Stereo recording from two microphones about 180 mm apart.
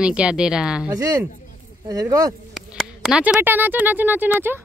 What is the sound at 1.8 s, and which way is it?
Speech, 20° right (ahead or behind).